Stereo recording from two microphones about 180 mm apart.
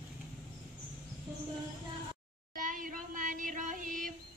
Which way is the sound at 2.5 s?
50° right (ahead or behind).